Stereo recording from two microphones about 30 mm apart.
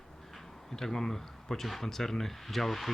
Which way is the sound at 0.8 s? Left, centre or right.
Centre.